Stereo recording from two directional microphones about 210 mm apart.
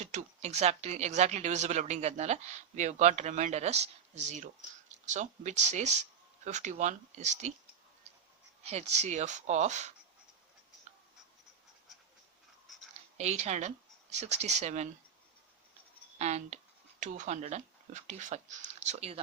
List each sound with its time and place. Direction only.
0.0 s speech: 35° right (ahead or behind)
8.6 s speech: 30° right (ahead or behind)
12.6 s a sound: centre (ahead or behind)
13.1 s speech: 30° right (ahead or behind)
16.1 s speech: 35° right (ahead or behind)